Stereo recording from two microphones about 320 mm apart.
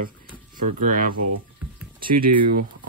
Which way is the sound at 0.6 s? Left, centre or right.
Right.